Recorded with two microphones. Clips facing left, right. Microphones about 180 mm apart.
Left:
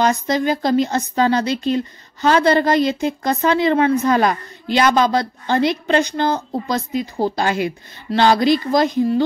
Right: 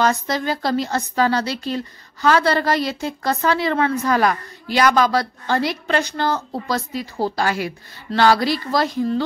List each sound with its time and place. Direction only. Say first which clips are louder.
0.0 s speech: left 3 dB; 20° left (ahead or behind)